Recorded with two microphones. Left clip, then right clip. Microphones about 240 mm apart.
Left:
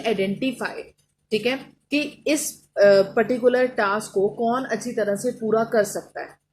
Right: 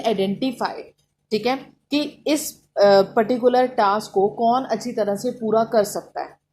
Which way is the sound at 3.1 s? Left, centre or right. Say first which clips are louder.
Right 2 dB; centre.